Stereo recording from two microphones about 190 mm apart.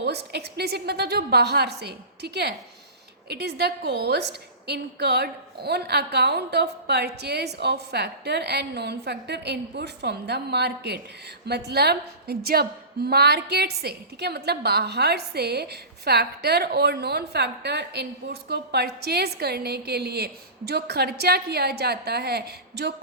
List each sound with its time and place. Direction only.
0.0 s a woman's voice: 60° right (ahead or behind)